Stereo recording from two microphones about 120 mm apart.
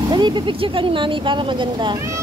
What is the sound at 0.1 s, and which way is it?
Speech, 40° right (ahead or behind).